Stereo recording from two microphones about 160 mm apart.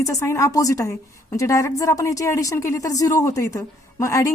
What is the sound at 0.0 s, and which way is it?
A woman's voice, 20° left (ahead or behind).